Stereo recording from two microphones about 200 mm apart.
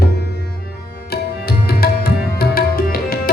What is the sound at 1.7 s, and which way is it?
Music, 50° left (ahead or behind).